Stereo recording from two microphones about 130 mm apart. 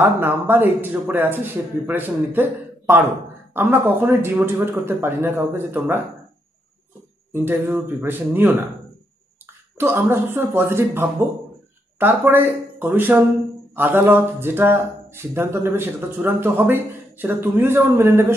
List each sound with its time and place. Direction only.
0.0 s speech: 15° right (ahead or behind)
3.5 s speech: 15° right (ahead or behind)
7.3 s speech: 15° right (ahead or behind)
9.8 s speech: 20° right (ahead or behind)